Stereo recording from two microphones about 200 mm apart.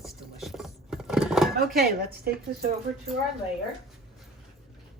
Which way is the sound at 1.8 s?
50° right (ahead or behind).